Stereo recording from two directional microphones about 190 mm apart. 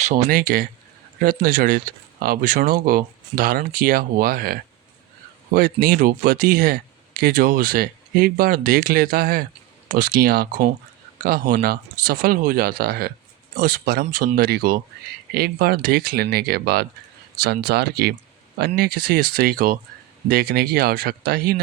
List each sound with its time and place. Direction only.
0.0 s speech: 45° right (ahead or behind)